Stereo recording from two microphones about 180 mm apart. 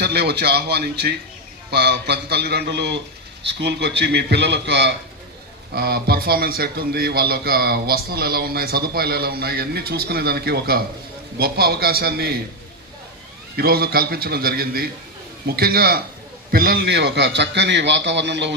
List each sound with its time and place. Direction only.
0.0 s a man's voice: 65° right (ahead or behind)
5.7 s a man's voice: 60° right (ahead or behind)
13.6 s a man's voice: 60° right (ahead or behind); by 18.5 s 75° right (ahead or behind)